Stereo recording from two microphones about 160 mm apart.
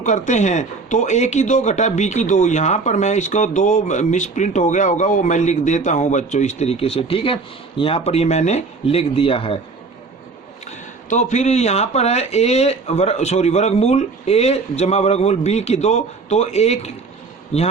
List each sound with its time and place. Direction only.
0.0 s speech: 50° left (ahead or behind)
10.7 s speech: 50° left (ahead or behind)